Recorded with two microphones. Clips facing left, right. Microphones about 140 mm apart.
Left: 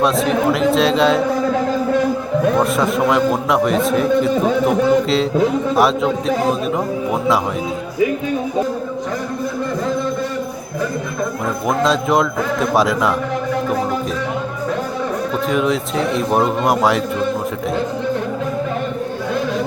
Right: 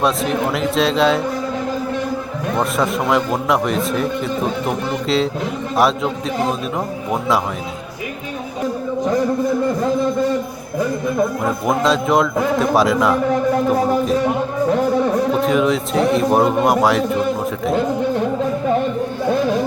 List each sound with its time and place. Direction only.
0.0 s a man's voice: centre (ahead or behind)
2.6 s a man's voice: centre (ahead or behind)
11.7 s a man's voice: centre (ahead or behind)
15.4 s a man's voice: centre (ahead or behind)